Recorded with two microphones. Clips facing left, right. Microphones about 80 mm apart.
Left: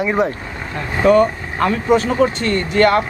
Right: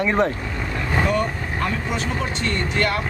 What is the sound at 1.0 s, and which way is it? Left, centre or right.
Speech, left.